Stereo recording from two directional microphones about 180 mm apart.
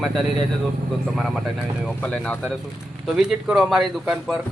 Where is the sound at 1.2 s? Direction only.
Centre (ahead or behind).